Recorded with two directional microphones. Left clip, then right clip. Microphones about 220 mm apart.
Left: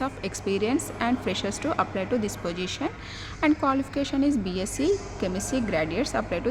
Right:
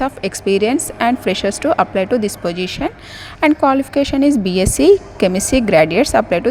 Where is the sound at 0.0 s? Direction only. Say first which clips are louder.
Right 11 dB; 30° right (ahead or behind).